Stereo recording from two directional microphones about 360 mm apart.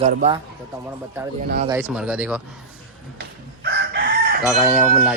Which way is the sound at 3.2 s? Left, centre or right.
Right.